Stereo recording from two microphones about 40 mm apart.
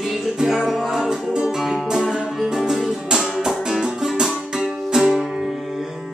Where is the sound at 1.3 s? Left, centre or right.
Centre.